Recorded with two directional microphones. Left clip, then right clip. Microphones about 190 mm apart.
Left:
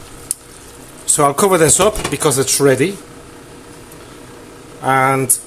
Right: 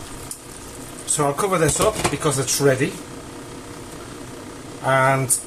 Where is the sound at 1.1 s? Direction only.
55° left (ahead or behind).